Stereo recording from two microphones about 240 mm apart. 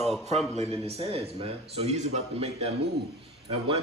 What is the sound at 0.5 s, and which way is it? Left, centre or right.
A man's voice, right.